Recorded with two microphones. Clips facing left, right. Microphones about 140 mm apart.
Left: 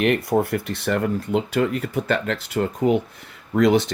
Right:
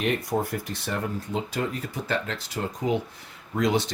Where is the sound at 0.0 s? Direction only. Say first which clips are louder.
Left 6 dB; 65° left (ahead or behind).